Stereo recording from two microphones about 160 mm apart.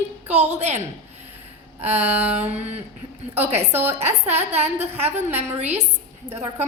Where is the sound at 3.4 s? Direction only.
10° right (ahead or behind).